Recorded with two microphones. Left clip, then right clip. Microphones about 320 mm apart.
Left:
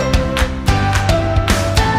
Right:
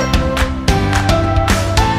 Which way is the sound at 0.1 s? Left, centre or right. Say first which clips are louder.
Right 1 dB; centre.